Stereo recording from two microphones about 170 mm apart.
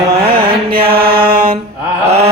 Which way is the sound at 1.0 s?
60° right (ahead or behind).